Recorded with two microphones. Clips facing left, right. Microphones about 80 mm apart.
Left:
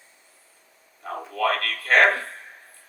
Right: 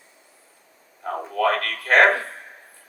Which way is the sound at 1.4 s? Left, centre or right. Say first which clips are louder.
Right 2 dB; right.